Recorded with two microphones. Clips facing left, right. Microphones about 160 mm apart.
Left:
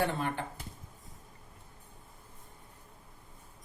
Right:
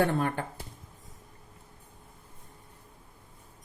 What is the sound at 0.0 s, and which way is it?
Speech, 50° right (ahead or behind).